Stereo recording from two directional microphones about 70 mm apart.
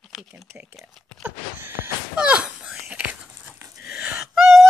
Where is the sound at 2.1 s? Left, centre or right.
Centre.